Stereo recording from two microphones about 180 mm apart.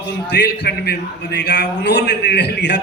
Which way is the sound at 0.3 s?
70° left (ahead or behind).